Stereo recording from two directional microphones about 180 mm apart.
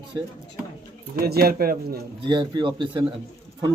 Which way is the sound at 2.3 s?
25° right (ahead or behind).